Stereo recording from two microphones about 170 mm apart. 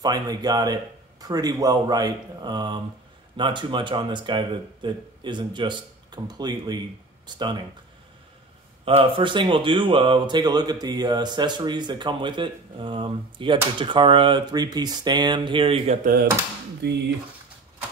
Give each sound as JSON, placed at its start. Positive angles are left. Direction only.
{"t": 0.0, "sound": "speech", "side_deg": -25}
{"t": 8.8, "sound": "speech", "side_deg": -30}
{"t": 16.0, "sound": "speech", "side_deg": -60}
{"t": 16.8, "sound": "speech", "side_deg": -80}